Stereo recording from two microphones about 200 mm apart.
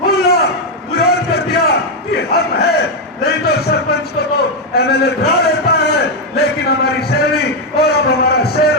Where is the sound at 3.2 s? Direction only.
50° left (ahead or behind).